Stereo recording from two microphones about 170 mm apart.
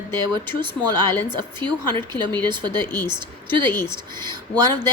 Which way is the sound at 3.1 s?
30° right (ahead or behind).